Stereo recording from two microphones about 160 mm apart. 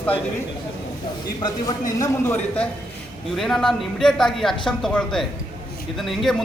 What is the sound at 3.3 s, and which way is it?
Speech, centre (ahead or behind).